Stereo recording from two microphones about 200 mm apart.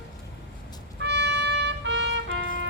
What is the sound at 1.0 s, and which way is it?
Trumpet, 60° right (ahead or behind).